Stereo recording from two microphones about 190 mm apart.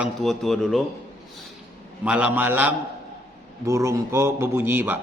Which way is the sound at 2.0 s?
5° right (ahead or behind).